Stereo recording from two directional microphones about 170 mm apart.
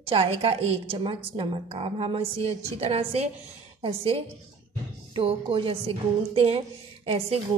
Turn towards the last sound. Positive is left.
turn(degrees=-35)  # may be behind; listen again after turning